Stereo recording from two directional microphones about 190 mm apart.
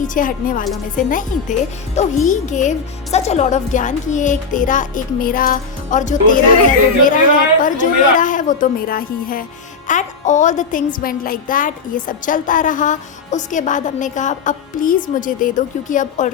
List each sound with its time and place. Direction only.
0.0 s speech: 45° left (ahead or behind)